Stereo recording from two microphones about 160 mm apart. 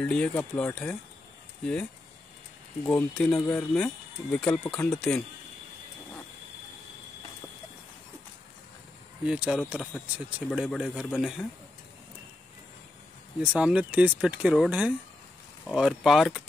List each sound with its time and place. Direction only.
0.0 s speech: 5° left (ahead or behind)
2.8 s speech: 10° left (ahead or behind)
3.3 s speech: 20° left (ahead or behind)
3.7 s speech: 5° left (ahead or behind)
9.2 s speech: 5° right (ahead or behind)
13.6 s speech: 5° right (ahead or behind)